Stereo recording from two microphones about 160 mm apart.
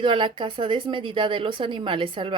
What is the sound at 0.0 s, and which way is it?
Speech, 30° right (ahead or behind).